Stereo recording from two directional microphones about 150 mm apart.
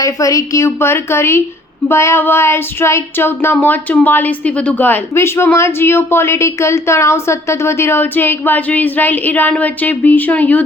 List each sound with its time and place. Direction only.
0.0 s child singing: 20° left (ahead or behind)